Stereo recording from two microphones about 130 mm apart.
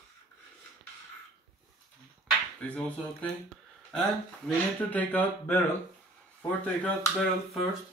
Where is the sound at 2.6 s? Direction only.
10° left (ahead or behind).